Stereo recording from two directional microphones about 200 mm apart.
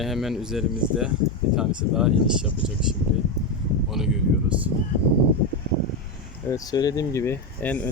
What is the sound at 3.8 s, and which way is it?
Speech, centre (ahead or behind).